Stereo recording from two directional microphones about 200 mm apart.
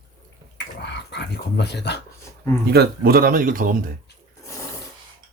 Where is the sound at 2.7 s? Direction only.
50° right (ahead or behind).